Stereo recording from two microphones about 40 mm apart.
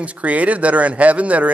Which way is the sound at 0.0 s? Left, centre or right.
Right.